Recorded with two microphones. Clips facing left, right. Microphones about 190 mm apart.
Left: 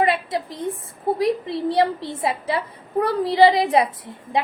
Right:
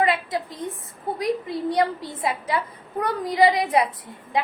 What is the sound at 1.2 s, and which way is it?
A woman's voice, 30° left (ahead or behind).